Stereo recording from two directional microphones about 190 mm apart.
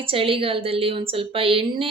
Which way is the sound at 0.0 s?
30° right (ahead or behind).